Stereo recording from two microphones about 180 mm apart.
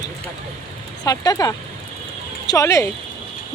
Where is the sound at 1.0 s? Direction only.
20° left (ahead or behind).